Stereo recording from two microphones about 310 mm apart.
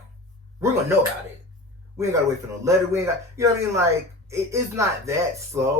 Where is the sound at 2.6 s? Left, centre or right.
Centre.